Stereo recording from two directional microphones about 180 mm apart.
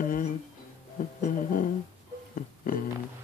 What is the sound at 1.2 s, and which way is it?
Music, 50° left (ahead or behind).